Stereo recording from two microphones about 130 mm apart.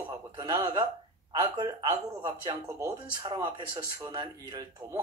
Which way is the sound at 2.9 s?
35° right (ahead or behind).